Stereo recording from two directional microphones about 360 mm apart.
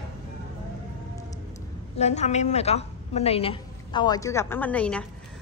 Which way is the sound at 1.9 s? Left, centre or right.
Centre.